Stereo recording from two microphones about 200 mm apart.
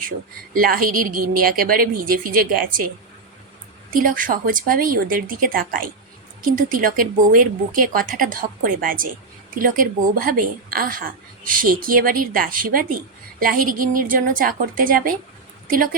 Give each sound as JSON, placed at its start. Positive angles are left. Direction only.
{"t": 0.5, "sound": "a woman's voice", "side_deg": -45}
{"t": 3.9, "sound": "a woman's voice", "side_deg": -45}